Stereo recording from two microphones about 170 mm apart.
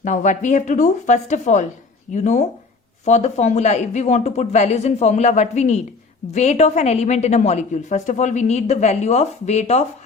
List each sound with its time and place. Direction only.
0.0 s a woman's voice: 45° left (ahead or behind)